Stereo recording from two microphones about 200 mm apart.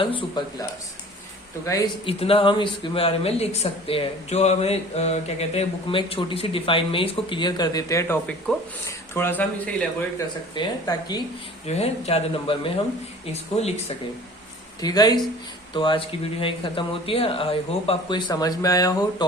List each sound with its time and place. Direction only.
0.0 s speech: 25° left (ahead or behind)
1.6 s speech: 15° left (ahead or behind)
2.0 s speech: 30° left (ahead or behind); by 9.7 s 10° left (ahead or behind)
10.2 s speech: 20° left (ahead or behind)
11.6 s speech: 30° left (ahead or behind)
14.8 s speech: 20° left (ahead or behind)